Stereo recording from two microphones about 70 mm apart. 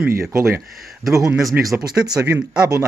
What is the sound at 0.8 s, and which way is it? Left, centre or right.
Speech, centre.